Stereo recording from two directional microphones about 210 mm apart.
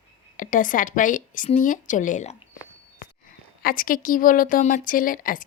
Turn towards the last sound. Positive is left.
turn(degrees=40)  # may be behind; listen again after turning